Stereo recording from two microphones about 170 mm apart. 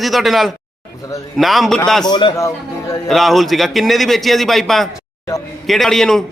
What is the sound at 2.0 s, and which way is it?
Speech, 25° left (ahead or behind).